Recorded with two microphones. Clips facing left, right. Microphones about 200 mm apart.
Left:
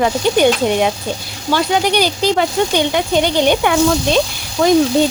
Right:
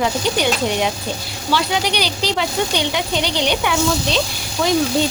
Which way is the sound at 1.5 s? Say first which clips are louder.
Left 5 dB; 45° left (ahead or behind).